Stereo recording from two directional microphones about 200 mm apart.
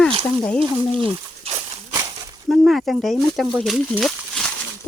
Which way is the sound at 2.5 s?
Centre (ahead or behind).